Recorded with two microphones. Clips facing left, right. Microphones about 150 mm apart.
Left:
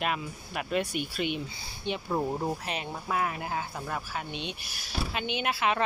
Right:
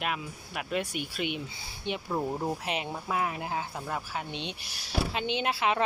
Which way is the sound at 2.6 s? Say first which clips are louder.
Right 1 dB; 20° right (ahead or behind).